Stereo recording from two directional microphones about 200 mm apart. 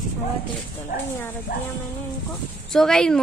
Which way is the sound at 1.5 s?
50° left (ahead or behind).